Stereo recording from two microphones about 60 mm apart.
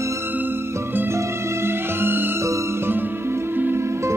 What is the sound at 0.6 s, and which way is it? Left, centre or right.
Music, right.